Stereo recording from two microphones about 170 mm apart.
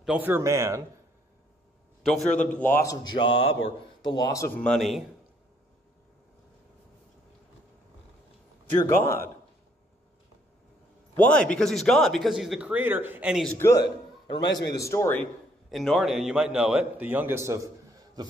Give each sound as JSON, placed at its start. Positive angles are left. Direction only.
{"t": 0.0, "sound": "speech", "side_deg": -10}
{"t": 2.2, "sound": "a man's voice", "side_deg": 10}
{"t": 4.6, "sound": "a man's voice", "side_deg": 0}
{"t": 8.9, "sound": "speech", "side_deg": 15}
{"t": 11.1, "sound": "a man's voice", "side_deg": 10}
{"t": 13.7, "sound": "a man's voice", "side_deg": 90}
{"t": 14.8, "sound": "speech", "side_deg": 15}
{"t": 15.7, "sound": "a man's voice", "side_deg": 0}